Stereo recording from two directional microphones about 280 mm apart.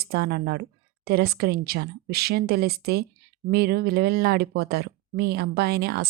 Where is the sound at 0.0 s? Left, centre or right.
Right.